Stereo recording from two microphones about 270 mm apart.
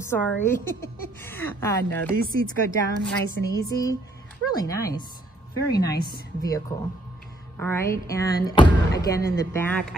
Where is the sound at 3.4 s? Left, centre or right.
Left.